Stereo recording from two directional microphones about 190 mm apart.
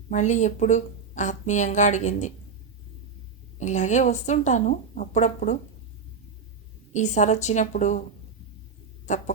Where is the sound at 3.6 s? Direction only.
40° left (ahead or behind).